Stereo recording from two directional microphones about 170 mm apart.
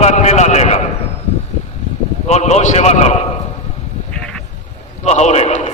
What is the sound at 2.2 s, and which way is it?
Speech, 40° left (ahead or behind).